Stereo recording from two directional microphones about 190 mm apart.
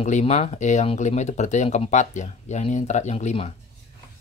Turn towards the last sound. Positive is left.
turn(degrees=35)  # may be behind; listen again after turning